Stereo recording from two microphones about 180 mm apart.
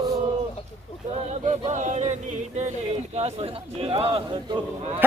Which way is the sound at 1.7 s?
40° right (ahead or behind).